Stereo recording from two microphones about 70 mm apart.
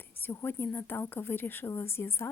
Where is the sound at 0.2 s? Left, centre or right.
Left.